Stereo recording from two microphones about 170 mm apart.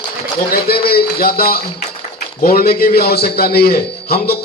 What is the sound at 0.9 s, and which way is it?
A man's voice, 65° left (ahead or behind).